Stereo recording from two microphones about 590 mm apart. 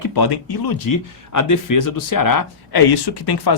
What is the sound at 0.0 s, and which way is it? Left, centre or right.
Speech, left.